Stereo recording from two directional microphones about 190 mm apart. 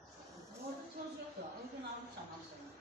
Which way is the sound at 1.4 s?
60° right (ahead or behind).